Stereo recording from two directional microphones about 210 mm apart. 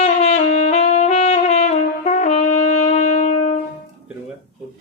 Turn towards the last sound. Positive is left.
turn(degrees=35)  # may be behind; listen again after turning